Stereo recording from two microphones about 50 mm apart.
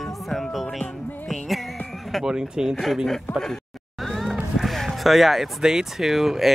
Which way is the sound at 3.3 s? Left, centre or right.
Left.